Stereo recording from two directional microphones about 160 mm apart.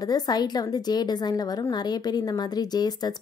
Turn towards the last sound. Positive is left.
turn(degrees=25)  # may be behind; listen again after turning